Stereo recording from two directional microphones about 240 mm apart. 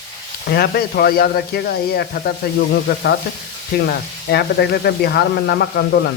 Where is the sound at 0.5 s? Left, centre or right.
Left.